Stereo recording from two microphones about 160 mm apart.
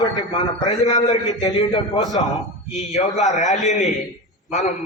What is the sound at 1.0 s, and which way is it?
A man's voice, 25° left (ahead or behind).